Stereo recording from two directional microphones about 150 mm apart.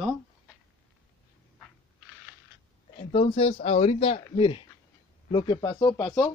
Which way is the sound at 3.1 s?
40° left (ahead or behind).